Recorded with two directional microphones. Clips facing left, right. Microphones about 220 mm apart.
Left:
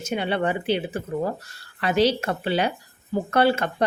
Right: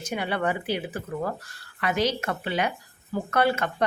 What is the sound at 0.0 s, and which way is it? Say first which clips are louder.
Speech: left 3 dB; 25° left (ahead or behind).